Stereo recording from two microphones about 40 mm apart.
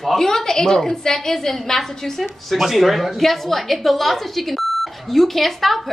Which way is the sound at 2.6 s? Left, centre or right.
Centre.